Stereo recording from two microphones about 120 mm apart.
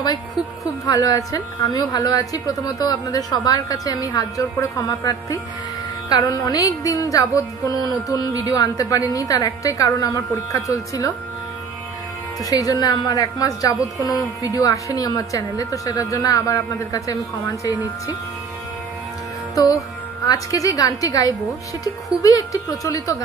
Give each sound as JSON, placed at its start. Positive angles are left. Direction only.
{"t": 0.8, "sound": "a woman's voice", "side_deg": 30}
{"t": 12.4, "sound": "a woman's voice", "side_deg": 30}
{"t": 19.5, "sound": "music", "side_deg": 30}
{"t": 20.2, "sound": "a woman's voice", "side_deg": 30}